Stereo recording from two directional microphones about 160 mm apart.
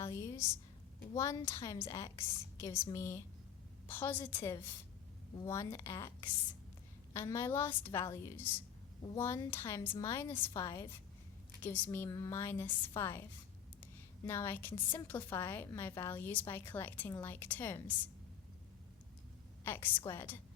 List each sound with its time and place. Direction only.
0.0 s a sound: 20° left (ahead or behind)
1.1 s a woman's voice: 20° left (ahead or behind)
14.3 s a woman's voice: 15° left (ahead or behind)
20.1 s a woman's voice: 15° left (ahead or behind)